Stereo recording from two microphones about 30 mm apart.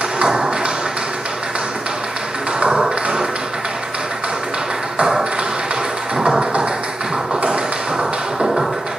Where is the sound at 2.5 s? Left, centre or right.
Right.